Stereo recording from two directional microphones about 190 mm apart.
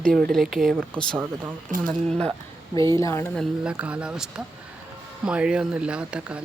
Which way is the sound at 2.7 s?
15° left (ahead or behind).